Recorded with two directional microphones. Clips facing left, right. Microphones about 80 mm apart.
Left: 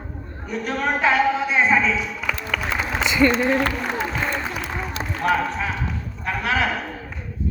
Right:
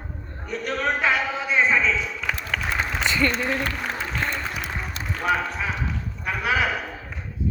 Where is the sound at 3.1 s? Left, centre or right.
Centre.